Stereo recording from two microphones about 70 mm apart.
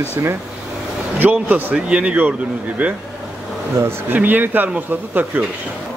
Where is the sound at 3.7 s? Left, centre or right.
Right.